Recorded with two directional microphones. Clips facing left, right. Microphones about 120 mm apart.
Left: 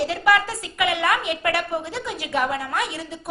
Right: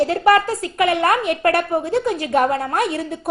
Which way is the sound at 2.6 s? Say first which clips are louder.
Right 6 dB; 55° right (ahead or behind).